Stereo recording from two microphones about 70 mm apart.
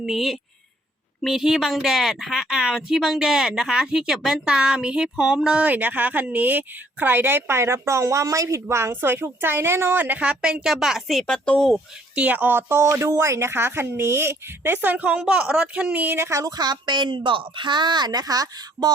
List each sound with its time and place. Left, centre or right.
0.0 s a woman's voice: centre
5.6 s speech: right
8.6 s a woman's voice: right; by 11.2 s centre
11.2 s speech: centre
12.1 s a woman's voice: right
16.5 s a woman's voice: right